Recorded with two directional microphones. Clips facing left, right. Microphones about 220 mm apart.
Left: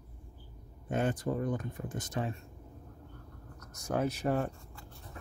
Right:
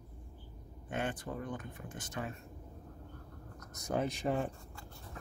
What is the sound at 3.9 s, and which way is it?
Speech, centre (ahead or behind).